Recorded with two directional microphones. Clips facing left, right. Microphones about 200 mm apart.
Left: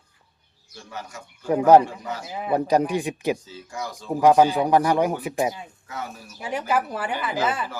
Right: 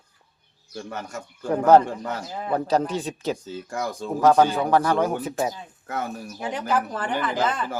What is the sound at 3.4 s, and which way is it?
Speech, 55° right (ahead or behind).